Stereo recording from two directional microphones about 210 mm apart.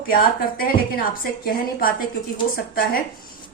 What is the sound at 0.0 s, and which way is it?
Speech, 45° left (ahead or behind).